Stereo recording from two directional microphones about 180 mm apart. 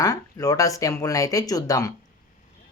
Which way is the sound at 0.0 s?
20° left (ahead or behind).